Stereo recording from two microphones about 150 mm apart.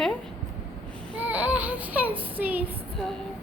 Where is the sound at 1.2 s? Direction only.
10° right (ahead or behind).